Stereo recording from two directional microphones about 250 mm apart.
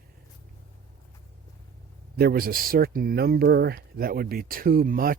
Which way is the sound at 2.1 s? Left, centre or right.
Right.